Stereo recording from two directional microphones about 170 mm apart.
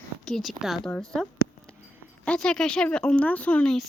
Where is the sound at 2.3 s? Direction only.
5° left (ahead or behind).